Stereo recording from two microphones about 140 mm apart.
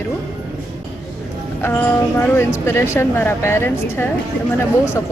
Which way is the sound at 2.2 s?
15° left (ahead or behind).